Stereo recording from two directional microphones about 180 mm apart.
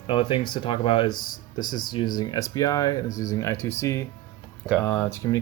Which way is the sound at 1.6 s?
25° left (ahead or behind).